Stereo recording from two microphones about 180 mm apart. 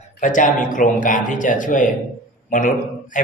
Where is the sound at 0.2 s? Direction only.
45° left (ahead or behind).